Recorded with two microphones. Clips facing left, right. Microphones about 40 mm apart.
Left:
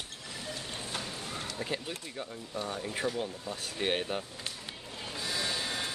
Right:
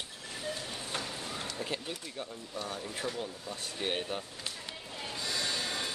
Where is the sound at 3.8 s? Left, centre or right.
Centre.